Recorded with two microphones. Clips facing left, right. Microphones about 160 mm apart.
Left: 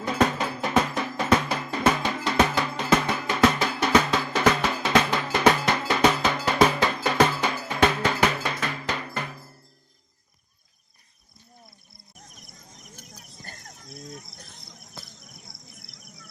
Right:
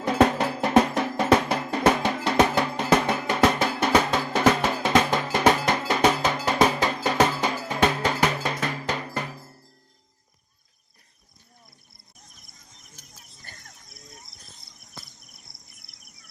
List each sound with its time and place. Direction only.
0.0 s music: 65° right (ahead or behind)
3.1 s drum: 50° right (ahead or behind)
7.4 s cowbell: 40° right (ahead or behind)
8.7 s music: 40° right (ahead or behind)
13.0 s a sound: 45° left (ahead or behind)
14.0 s a sound: 80° left